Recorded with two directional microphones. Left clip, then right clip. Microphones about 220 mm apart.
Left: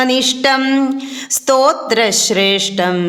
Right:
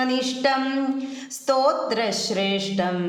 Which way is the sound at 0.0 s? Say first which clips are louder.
Left 9 dB; 35° left (ahead or behind).